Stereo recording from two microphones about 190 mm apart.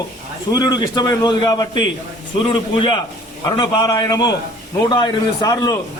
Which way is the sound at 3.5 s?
20° left (ahead or behind).